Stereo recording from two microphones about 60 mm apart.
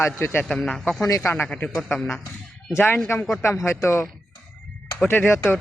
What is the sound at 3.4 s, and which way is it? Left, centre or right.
Speech, left.